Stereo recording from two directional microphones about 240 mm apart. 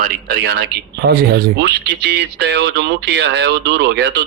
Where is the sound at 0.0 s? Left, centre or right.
Right.